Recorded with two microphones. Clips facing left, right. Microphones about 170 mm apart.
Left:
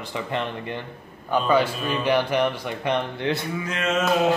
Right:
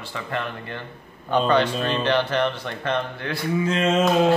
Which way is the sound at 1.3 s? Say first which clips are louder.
Right 1 dB; 10° left (ahead or behind).